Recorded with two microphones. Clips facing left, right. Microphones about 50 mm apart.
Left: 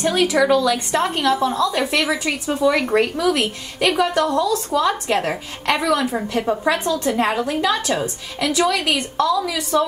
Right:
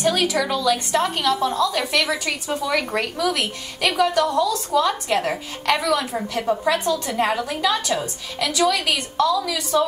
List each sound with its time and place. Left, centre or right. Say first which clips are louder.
0.0 s a woman's voice: left 3 dB; left
6.0 s a woman's voice: left 2 dB; centre